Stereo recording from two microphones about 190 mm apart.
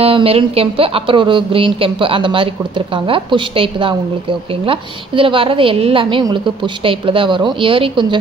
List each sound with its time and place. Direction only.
0.0 s speech: 30° right (ahead or behind)